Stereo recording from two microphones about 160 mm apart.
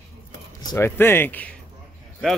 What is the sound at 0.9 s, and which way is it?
Speech, 15° left (ahead or behind).